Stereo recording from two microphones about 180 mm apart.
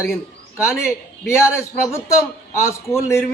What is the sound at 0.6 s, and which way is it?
A man's voice, 15° left (ahead or behind).